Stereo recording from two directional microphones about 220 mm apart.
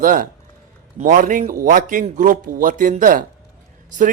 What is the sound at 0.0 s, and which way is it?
Speech, 35° right (ahead or behind).